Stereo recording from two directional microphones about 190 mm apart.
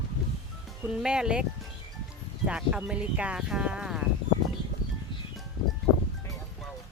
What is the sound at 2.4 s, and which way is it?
Speech, 5° right (ahead or behind).